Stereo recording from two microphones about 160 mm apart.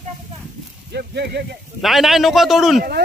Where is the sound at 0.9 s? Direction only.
90° right.